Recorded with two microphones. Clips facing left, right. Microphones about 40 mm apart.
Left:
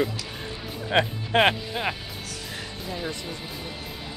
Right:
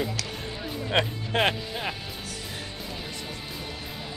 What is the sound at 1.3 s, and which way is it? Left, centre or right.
Speech, left.